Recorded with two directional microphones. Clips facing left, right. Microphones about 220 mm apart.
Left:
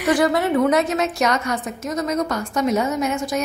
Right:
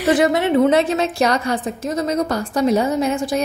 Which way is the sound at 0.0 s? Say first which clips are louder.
Right 2 dB; 25° right (ahead or behind).